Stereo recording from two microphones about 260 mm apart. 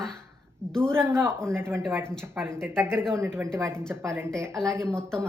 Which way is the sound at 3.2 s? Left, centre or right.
Centre.